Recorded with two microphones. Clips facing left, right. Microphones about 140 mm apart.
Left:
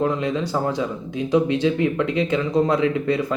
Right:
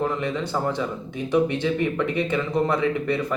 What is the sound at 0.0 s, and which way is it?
A man's voice, 15° left (ahead or behind).